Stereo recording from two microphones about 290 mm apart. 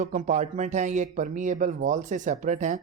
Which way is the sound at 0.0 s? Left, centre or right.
Right.